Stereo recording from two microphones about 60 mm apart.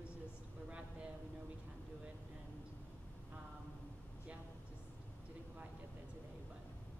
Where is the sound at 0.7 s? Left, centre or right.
Centre.